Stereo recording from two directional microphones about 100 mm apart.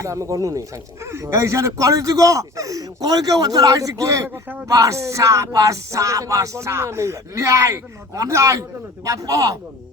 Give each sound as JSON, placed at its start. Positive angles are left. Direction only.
{"t": 0.0, "sound": "speech", "side_deg": -30}